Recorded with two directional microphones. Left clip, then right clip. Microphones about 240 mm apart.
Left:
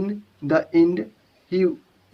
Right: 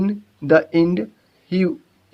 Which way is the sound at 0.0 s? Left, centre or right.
Right.